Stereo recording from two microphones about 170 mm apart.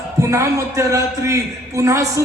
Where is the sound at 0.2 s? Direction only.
15° right (ahead or behind).